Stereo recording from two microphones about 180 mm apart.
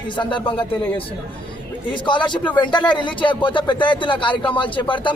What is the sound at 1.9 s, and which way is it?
A man's voice, 25° left (ahead or behind).